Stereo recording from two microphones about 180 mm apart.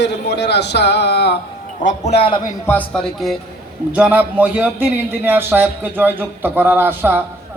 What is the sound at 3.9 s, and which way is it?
A man's voice, 10° right (ahead or behind).